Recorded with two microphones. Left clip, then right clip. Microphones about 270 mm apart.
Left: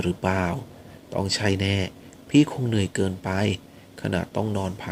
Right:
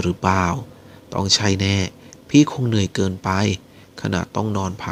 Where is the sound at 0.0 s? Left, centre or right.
Right.